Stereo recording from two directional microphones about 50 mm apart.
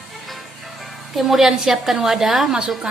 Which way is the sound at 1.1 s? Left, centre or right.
Centre.